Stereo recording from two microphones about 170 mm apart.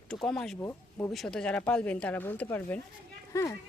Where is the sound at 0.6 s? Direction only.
15° left (ahead or behind).